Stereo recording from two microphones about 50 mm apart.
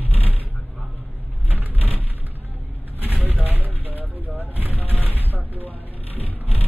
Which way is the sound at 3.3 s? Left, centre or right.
Right.